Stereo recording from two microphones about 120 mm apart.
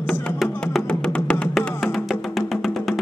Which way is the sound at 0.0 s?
10° left (ahead or behind).